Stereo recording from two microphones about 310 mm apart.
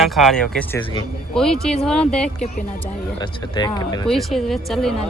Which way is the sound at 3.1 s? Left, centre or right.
Centre.